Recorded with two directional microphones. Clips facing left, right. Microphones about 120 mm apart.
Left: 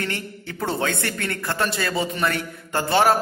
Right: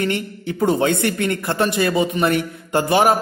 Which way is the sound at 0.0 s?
15° right (ahead or behind).